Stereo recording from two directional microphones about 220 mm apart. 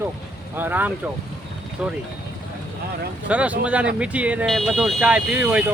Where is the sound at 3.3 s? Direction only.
5° right (ahead or behind).